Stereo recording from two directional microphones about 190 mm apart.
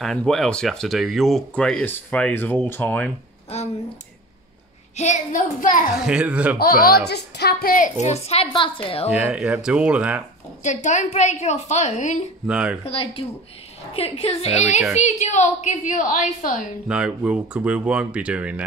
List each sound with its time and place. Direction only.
0.0 s speech: centre (ahead or behind)
3.5 s a woman's voice: 35° left (ahead or behind)
4.9 s a woman's voice: 40° left (ahead or behind)
5.9 s speech: 5° right (ahead or behind)
6.6 s a woman's voice: 50° left (ahead or behind); by 9.1 s 30° left (ahead or behind)
9.1 s speech: 5° right (ahead or behind)
10.6 s a woman's voice: 40° left (ahead or behind)
12.4 s speech: 5° right (ahead or behind)
12.8 s a woman's voice: 30° left (ahead or behind)
16.8 s speech: 5° right (ahead or behind)